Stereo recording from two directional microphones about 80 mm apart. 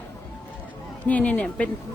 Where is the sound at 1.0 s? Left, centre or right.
Centre.